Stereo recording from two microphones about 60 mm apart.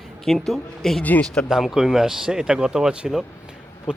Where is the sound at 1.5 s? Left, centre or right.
Centre.